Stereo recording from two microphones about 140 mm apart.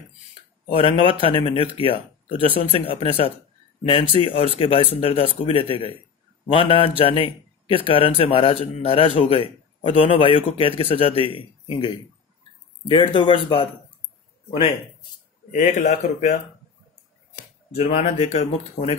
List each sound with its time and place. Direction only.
0.7 s a man's voice: 40° left (ahead or behind)
15.5 s speech: 60° left (ahead or behind)
17.7 s speech: 45° left (ahead or behind)
18.0 s speech: 55° left (ahead or behind)